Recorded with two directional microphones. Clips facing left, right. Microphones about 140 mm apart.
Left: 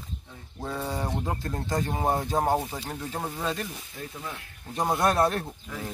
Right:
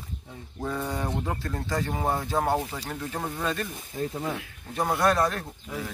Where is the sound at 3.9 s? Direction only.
40° right (ahead or behind).